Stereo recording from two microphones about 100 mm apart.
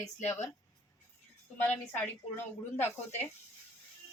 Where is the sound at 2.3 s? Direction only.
25° left (ahead or behind).